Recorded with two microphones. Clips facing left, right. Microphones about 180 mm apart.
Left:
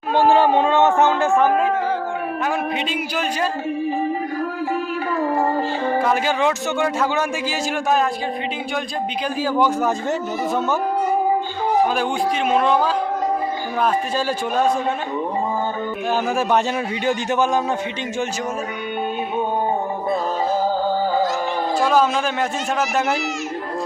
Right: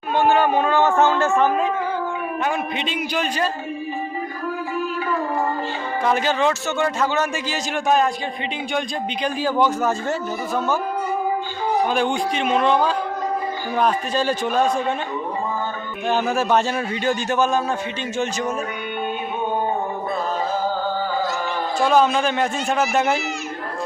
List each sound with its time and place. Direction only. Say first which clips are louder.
0.1 s speech: left 2 dB; 30° left (ahead or behind)
2.7 s a man's voice: even; 5° left (ahead or behind)
6.0 s a man's voice: right 2 dB; 5° left (ahead or behind)
9.2 s a man's voice: even; 5° left (ahead or behind)
12.5 s a man's voice: even; 5° left (ahead or behind)
16.0 s a man's voice: right 1 dB; 10° left (ahead or behind)
21.8 s a man's voice: right 1 dB; 5° left (ahead or behind)